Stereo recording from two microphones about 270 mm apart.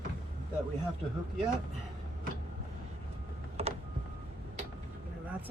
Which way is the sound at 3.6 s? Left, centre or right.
Right.